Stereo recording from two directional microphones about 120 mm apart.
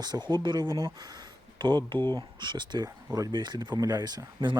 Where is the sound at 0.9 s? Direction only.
35° right (ahead or behind).